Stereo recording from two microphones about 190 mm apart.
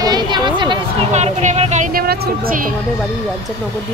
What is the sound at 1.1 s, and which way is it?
Speech, 40° right (ahead or behind).